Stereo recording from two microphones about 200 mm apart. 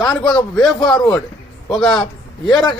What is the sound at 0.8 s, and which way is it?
Speech, 20° left (ahead or behind).